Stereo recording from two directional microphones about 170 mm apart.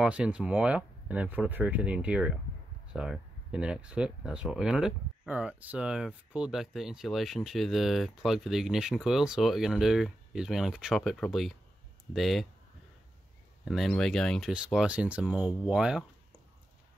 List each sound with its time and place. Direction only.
0.0 s speech: 5° right (ahead or behind)
13.7 s speech: centre (ahead or behind)